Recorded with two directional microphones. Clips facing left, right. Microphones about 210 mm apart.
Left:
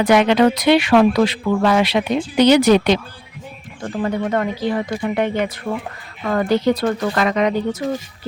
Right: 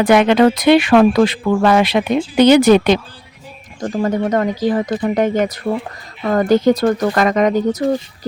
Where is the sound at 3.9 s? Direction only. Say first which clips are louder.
Right 3 dB; 40° right (ahead or behind).